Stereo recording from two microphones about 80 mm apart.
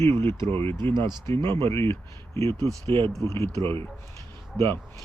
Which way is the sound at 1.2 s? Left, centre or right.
Left.